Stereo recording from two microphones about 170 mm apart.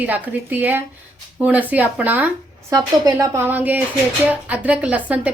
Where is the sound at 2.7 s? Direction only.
20° right (ahead or behind).